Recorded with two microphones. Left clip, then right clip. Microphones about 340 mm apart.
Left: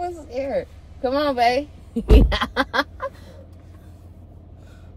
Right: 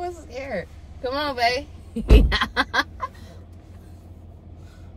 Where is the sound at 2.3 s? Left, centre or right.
Centre.